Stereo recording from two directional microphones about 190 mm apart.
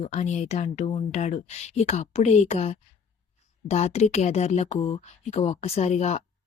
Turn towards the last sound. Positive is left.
turn(degrees=35)  # may be behind; listen again after turning